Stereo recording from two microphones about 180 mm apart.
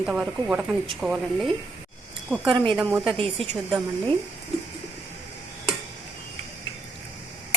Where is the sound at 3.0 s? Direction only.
30° right (ahead or behind).